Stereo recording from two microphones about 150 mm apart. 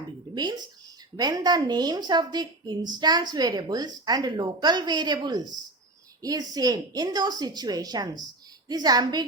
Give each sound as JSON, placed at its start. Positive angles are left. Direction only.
{"t": 0.3, "sound": "a woman's voice", "side_deg": -30}